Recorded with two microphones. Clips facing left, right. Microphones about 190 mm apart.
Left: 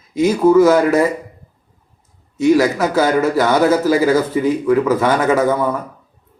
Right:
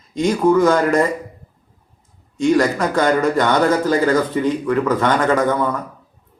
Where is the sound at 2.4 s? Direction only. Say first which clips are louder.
Left 3 dB; 5° left (ahead or behind).